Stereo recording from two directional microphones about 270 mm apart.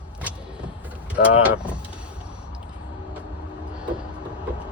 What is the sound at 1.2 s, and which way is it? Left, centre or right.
Speech, left.